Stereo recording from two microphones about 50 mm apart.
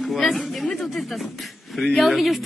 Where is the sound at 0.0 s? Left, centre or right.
Centre.